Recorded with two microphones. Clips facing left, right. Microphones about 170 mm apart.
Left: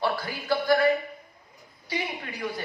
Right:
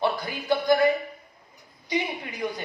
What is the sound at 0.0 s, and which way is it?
Music, 20° right (ahead or behind).